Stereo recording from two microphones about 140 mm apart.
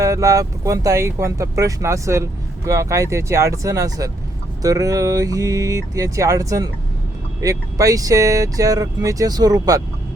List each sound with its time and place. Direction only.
0.0 s speech: 25° right (ahead or behind)